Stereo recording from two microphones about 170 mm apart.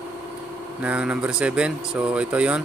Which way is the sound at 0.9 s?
5° right (ahead or behind).